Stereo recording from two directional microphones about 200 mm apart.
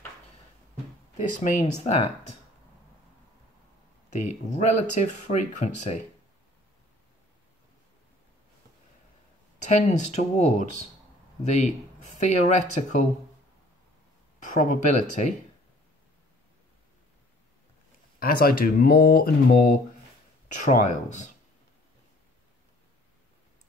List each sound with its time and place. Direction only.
1.4 s speech: 35° left (ahead or behind)
4.1 s speech: 35° left (ahead or behind)
9.7 s speech: 35° left (ahead or behind)
14.5 s speech: 40° left (ahead or behind)
18.2 s speech: 45° left (ahead or behind)
20.6 s speech: 40° left (ahead or behind)